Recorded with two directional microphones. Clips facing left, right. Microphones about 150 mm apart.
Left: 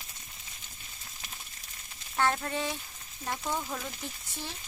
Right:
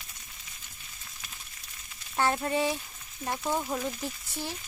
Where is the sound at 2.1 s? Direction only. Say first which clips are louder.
Right 2 dB; 15° right (ahead or behind).